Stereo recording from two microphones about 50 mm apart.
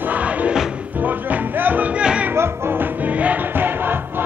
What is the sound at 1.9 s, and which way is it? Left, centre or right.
Music, right.